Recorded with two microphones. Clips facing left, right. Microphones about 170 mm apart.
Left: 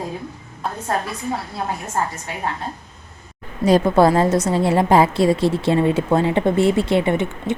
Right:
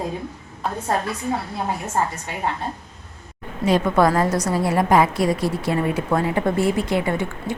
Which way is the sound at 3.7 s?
35° left (ahead or behind).